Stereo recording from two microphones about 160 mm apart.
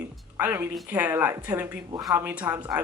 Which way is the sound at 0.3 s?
15° right (ahead or behind).